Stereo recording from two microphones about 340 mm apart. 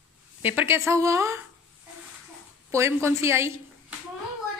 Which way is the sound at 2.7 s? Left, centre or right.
Centre.